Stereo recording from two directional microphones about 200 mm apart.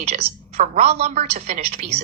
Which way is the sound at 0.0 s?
30° right (ahead or behind).